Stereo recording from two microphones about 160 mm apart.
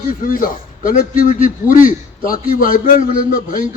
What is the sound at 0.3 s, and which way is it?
A man's voice, 60° left (ahead or behind).